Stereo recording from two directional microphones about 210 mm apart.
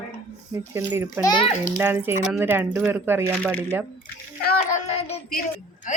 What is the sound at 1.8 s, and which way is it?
A woman's voice, 10° right (ahead or behind).